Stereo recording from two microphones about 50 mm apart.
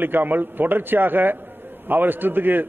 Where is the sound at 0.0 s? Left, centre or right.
Right.